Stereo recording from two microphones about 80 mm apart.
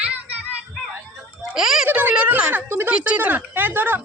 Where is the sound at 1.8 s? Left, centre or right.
Right.